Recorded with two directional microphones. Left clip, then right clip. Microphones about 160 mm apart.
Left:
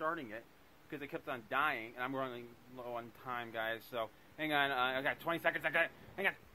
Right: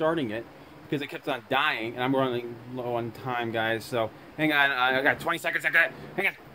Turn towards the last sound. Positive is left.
turn(degrees=-5)  # may be behind; listen again after turning